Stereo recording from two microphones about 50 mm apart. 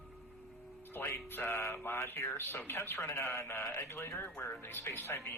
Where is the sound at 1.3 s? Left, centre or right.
Left.